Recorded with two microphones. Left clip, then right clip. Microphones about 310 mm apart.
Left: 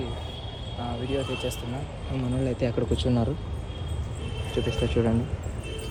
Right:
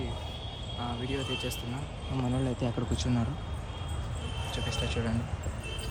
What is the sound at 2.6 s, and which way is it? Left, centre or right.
Speech, right.